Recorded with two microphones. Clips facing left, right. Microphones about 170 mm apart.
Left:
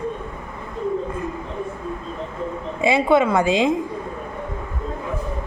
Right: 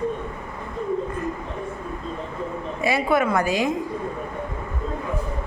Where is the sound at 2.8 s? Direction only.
25° left (ahead or behind).